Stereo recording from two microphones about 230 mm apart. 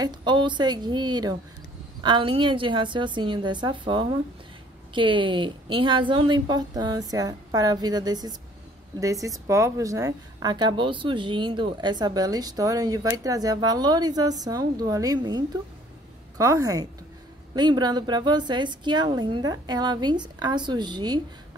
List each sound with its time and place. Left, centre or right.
0.0 s a woman's voice: centre